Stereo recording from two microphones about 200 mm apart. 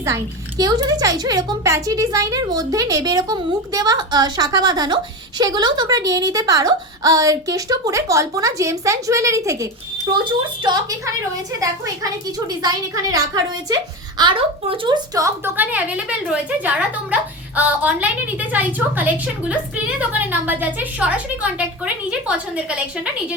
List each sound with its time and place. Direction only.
0.0 s speech: 15° right (ahead or behind)
12.6 s speech: 20° right (ahead or behind)